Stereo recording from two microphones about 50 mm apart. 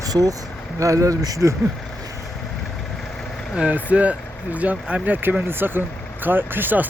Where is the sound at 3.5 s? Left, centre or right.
Right.